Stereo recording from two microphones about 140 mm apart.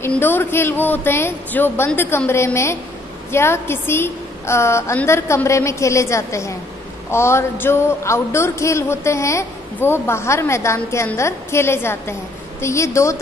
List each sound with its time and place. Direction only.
0.0 s a woman's voice: 15° left (ahead or behind)